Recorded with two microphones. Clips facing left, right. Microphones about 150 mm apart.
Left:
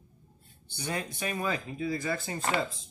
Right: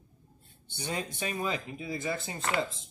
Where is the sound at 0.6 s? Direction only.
25° right (ahead or behind).